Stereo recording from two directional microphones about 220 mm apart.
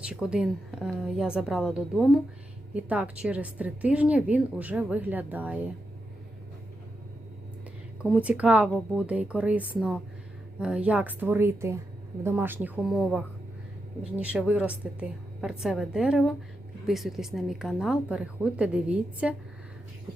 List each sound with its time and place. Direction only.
0.0 s a woman's voice: 5° right (ahead or behind)
8.1 s a woman's voice: 5° right (ahead or behind)